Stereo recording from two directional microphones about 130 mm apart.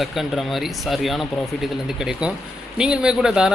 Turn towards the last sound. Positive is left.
turn(degrees=-5)  # may be behind; listen again after turning